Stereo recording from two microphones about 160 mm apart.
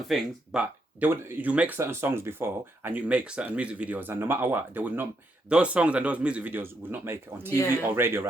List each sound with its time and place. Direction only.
0.1 s speech: 5° right (ahead or behind)